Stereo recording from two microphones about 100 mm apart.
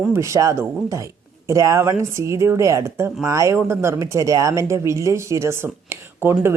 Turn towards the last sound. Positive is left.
turn(degrees=-25)  # may be behind; listen again after turning